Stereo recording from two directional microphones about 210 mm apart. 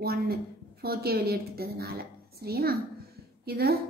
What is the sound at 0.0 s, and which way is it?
A woman's voice, 45° right (ahead or behind).